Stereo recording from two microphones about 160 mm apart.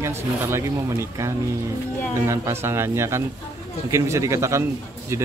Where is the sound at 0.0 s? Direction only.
15° right (ahead or behind).